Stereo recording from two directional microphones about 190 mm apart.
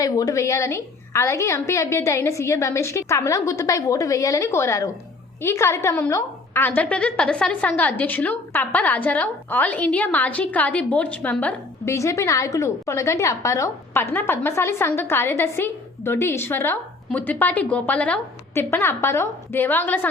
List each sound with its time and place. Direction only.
0.0 s a woman's voice: 15° left (ahead or behind)